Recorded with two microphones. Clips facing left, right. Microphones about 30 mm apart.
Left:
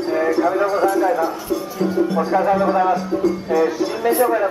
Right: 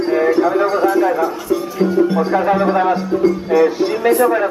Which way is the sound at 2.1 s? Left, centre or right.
Right.